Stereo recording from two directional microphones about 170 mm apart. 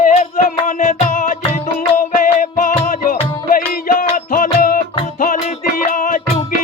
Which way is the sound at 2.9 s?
55° left (ahead or behind).